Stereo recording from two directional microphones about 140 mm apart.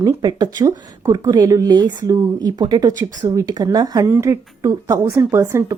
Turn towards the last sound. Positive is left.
turn(degrees=-20)  # may be behind; listen again after turning